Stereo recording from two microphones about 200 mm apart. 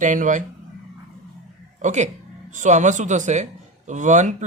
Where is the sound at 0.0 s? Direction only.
40° right (ahead or behind).